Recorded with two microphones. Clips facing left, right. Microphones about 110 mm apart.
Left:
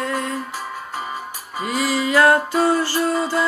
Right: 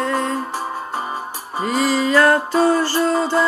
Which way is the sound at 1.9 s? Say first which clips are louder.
Even; 10° left (ahead or behind).